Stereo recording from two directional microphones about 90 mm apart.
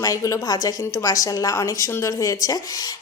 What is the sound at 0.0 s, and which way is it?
A woman's voice, 40° left (ahead or behind).